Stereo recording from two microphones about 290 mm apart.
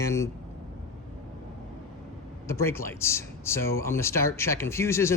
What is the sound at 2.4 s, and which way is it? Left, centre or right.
Speech, centre.